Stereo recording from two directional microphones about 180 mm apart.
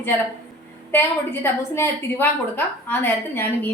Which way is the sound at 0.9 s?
15° left (ahead or behind).